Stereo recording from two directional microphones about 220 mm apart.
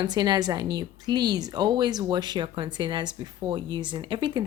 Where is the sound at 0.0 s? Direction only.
20° right (ahead or behind).